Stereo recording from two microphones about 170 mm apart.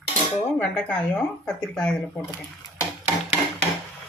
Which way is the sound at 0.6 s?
5° left (ahead or behind).